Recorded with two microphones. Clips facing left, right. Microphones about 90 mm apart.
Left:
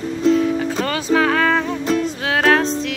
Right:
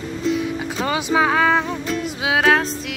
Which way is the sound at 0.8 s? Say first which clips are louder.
Right 1 dB; 15° right (ahead or behind).